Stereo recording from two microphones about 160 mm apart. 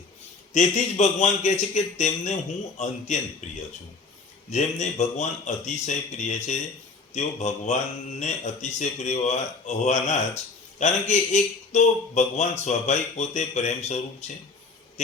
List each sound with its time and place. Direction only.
0.5 s speech: 45° left (ahead or behind)